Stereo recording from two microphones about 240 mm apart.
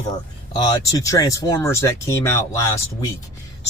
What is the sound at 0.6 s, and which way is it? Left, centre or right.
Speech, centre.